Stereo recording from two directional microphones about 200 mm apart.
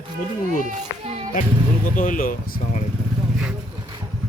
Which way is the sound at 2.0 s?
45° left (ahead or behind).